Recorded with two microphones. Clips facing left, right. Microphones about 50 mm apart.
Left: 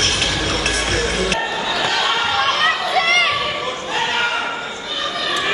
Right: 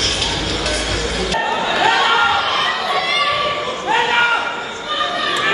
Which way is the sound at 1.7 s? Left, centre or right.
Centre.